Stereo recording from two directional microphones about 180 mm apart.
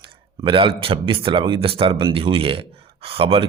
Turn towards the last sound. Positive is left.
turn(degrees=-30)  # may be behind; listen again after turning